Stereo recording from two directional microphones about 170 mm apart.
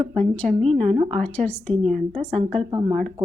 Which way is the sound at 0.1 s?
5° left (ahead or behind).